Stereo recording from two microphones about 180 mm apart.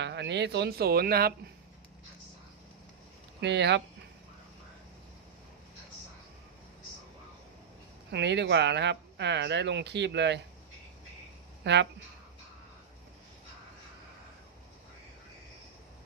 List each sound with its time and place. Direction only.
0.0 s speech: 75° right (ahead or behind); by 1.3 s 60° right (ahead or behind)
3.4 s speech: 70° right (ahead or behind)
8.1 s speech: 75° right (ahead or behind)
11.6 s speech: 75° right (ahead or behind)